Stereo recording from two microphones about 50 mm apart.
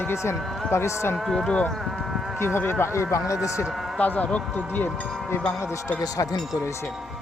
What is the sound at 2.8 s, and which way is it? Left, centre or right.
Speech, left.